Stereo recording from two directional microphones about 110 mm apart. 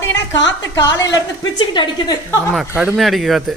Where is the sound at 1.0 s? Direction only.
35° left (ahead or behind).